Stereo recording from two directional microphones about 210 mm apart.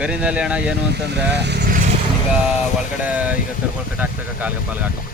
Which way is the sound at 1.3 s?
50° right (ahead or behind).